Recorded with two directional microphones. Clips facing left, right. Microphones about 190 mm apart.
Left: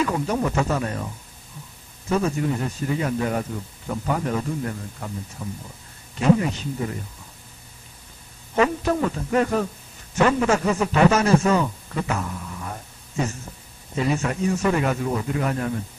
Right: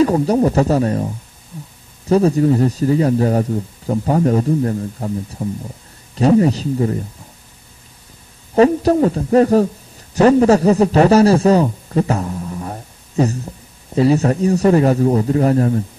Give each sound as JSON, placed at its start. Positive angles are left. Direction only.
{"t": 0.0, "sound": "speech", "side_deg": -35}
{"t": 8.5, "sound": "a man's voice", "side_deg": -35}